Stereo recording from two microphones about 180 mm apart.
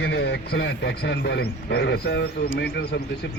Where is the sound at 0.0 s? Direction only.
70° left (ahead or behind).